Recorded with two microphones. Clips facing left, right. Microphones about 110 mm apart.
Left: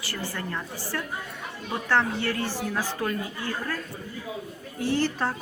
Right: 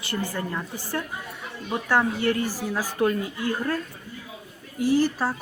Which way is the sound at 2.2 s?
10° right (ahead or behind).